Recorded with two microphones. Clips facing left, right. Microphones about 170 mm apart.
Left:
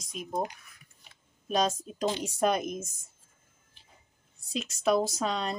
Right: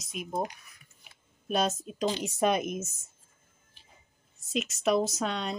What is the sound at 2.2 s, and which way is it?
Speech, centre (ahead or behind).